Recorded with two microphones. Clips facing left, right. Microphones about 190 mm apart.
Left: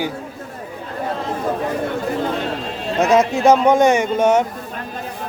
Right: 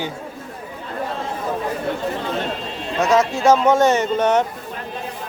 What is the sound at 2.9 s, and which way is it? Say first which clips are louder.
Speech: left 2 dB; 15° left (ahead or behind).